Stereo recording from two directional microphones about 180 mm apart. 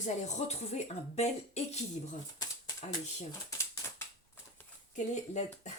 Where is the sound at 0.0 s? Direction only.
40° left (ahead or behind).